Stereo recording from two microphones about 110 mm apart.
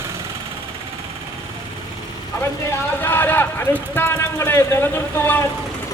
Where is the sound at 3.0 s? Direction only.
20° left (ahead or behind).